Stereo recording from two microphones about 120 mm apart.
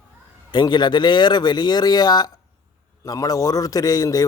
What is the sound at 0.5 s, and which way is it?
A man's voice, 35° left (ahead or behind).